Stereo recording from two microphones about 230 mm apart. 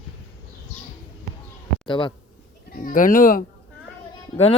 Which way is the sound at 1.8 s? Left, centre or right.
Left.